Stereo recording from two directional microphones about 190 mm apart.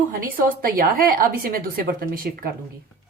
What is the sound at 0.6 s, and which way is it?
A woman's voice, 50° right (ahead or behind).